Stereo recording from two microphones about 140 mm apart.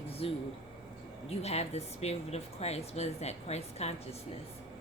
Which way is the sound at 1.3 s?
50° left (ahead or behind).